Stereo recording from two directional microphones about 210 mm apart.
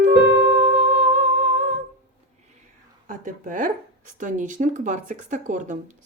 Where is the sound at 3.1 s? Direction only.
40° right (ahead or behind).